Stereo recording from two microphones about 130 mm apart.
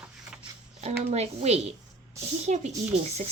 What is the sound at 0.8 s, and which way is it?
A woman's voice, 55° right (ahead or behind).